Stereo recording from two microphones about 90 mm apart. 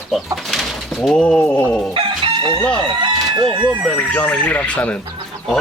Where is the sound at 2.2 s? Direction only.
75° right (ahead or behind).